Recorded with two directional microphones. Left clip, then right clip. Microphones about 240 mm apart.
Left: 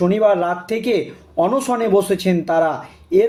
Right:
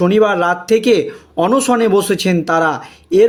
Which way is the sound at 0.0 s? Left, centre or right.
Right.